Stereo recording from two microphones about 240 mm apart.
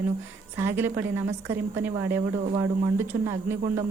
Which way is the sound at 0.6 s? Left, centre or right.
Centre.